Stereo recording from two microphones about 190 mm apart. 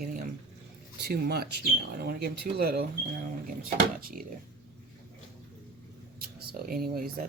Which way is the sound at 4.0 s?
50° right (ahead or behind).